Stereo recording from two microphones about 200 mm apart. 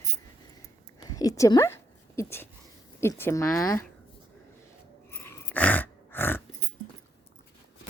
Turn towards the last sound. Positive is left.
turn(degrees=10)  # may be behind; listen again after turning